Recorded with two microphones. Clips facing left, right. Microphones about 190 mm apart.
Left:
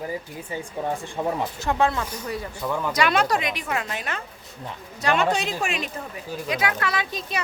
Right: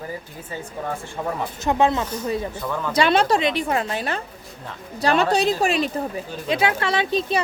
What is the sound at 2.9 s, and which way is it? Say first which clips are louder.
A woman's voice: right 5 dB; 30° right (ahead or behind).